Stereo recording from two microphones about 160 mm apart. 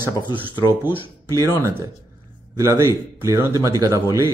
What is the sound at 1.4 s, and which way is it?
A man's voice, 20° right (ahead or behind).